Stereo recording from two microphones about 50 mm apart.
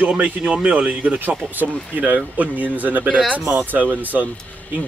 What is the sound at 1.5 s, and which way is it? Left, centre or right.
Speech, right.